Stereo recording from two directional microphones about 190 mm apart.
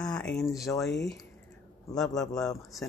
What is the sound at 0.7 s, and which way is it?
Speech, 10° left (ahead or behind).